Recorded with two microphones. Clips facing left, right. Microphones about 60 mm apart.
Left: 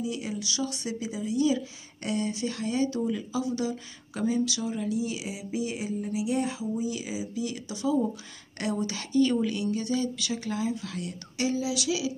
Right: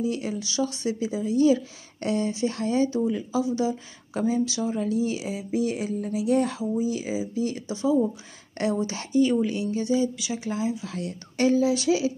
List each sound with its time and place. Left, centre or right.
0.0 s speech: right
11.3 s speech: right